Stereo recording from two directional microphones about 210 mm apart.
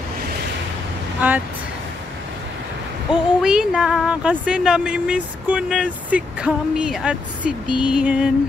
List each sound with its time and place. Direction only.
3.1 s speech: 5° right (ahead or behind)